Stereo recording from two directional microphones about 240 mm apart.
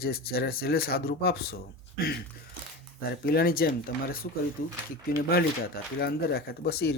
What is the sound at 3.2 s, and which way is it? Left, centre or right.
Speech, left.